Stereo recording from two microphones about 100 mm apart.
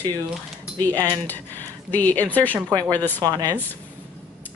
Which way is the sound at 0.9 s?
20° left (ahead or behind).